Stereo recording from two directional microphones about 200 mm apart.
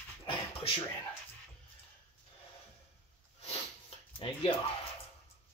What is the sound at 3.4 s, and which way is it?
Sniff, 30° left (ahead or behind).